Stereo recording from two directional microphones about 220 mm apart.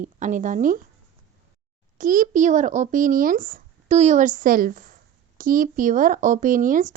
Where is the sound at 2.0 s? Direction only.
35° right (ahead or behind).